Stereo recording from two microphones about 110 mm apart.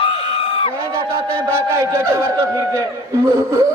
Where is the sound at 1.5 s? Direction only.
25° right (ahead or behind).